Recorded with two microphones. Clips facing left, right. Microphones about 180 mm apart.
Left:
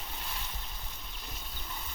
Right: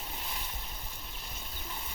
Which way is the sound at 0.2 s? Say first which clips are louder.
Left 1 dB; 10° right (ahead or behind).